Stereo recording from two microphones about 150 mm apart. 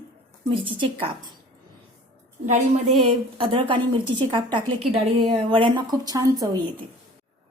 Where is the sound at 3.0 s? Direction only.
35° right (ahead or behind).